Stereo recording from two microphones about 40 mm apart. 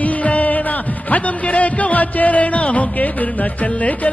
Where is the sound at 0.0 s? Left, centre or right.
Left.